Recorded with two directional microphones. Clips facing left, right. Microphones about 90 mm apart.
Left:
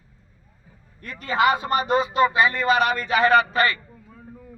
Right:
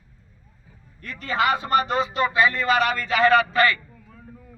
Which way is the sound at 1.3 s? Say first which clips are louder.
Left 1 dB; 20° left (ahead or behind).